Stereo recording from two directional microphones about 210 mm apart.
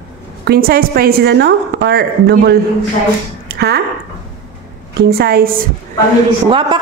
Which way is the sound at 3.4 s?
50° right (ahead or behind).